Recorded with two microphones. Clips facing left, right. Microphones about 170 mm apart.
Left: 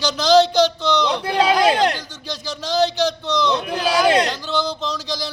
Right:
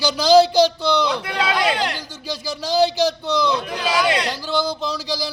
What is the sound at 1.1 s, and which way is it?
Speech, 30° left (ahead or behind).